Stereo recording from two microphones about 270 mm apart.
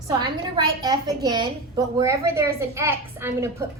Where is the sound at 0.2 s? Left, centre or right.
Centre.